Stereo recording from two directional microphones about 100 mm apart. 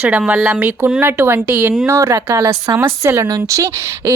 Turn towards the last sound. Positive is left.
turn(degrees=-30)  # may be behind; listen again after turning